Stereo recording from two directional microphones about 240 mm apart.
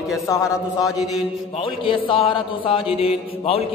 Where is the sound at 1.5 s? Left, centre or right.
Left.